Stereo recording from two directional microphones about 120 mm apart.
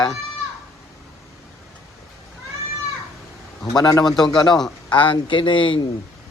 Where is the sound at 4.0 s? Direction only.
5° left (ahead or behind).